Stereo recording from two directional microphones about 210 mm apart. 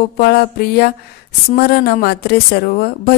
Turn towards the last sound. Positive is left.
turn(degrees=45)  # may be behind; listen again after turning